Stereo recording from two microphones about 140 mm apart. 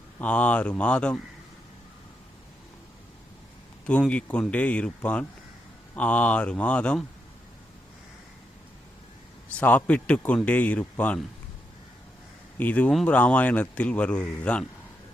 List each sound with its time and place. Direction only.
0.2 s speech: 10° left (ahead or behind)
3.8 s speech: 10° left (ahead or behind)
9.6 s speech: 10° left (ahead or behind)
12.5 s speech: 10° left (ahead or behind)